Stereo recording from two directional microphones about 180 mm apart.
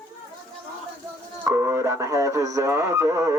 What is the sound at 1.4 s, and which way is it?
Speech, 15° right (ahead or behind).